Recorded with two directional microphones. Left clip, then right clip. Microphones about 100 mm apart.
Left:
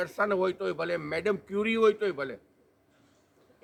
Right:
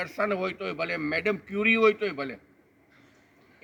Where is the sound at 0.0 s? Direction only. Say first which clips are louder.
Left 1 dB; 40° left (ahead or behind).